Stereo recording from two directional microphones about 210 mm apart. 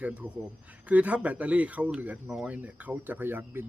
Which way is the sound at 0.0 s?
5° right (ahead or behind).